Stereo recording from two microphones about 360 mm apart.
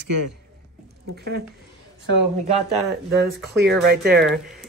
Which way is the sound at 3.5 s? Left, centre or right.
Right.